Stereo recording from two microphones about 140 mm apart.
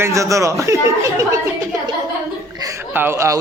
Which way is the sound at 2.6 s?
15° right (ahead or behind).